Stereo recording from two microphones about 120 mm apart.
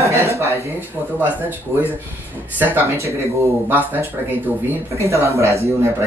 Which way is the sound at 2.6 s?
15° right (ahead or behind).